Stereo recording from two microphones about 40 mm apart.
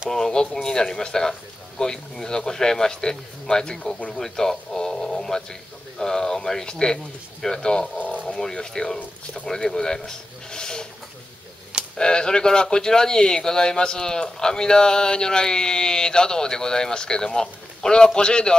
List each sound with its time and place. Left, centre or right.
0.1 s speech: centre
12.0 s speech: centre